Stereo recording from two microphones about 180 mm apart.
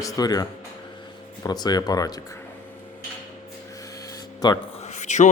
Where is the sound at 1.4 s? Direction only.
20° left (ahead or behind).